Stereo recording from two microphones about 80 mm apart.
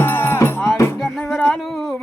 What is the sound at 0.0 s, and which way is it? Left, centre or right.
Music, left.